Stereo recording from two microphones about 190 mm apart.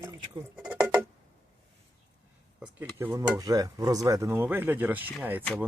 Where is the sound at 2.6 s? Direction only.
5° right (ahead or behind).